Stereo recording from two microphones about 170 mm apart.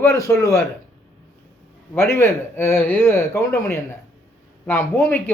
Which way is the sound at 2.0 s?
15° left (ahead or behind).